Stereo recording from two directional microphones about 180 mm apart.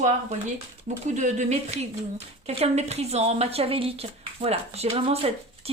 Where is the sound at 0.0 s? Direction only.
45° right (ahead or behind).